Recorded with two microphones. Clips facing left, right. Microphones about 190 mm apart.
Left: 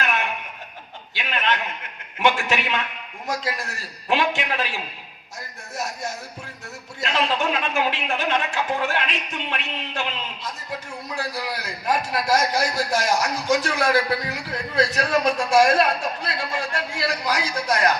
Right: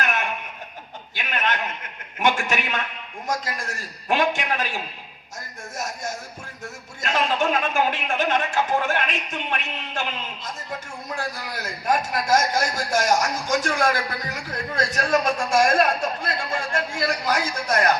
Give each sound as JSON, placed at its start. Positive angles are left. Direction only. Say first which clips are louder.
{"t": 0.0, "sound": "a sound", "louder": "left 1 dB", "side_deg": -45}
{"t": 2.1, "sound": "a man's voice", "louder": "left 1 dB", "side_deg": -45}
{"t": 5.7, "sound": "music", "louder": "left 1 dB", "side_deg": -45}
{"t": 7.0, "sound": "a man's voice", "louder": "right 1 dB", "side_deg": -45}